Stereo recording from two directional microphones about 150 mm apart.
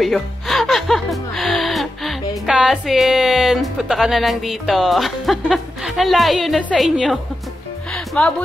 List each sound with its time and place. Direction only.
0.0 s speech: centre (ahead or behind)
7.9 s music: centre (ahead or behind)